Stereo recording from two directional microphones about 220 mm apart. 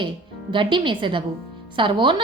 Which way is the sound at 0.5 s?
20° right (ahead or behind).